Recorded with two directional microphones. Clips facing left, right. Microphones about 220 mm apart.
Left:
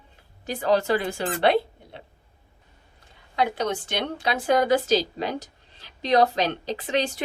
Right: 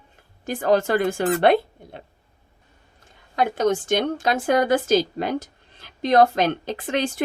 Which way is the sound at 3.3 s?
50° right (ahead or behind).